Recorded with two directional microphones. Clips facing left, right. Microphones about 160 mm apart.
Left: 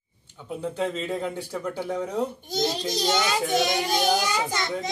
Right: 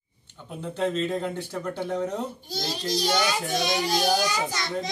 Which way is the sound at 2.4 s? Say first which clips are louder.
Left 4 dB; 20° left (ahead or behind).